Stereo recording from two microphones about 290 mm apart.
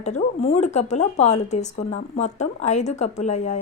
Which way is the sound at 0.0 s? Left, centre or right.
Left.